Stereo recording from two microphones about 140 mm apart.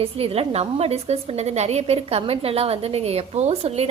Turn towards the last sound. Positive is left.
turn(degrees=-45)  # may be behind; listen again after turning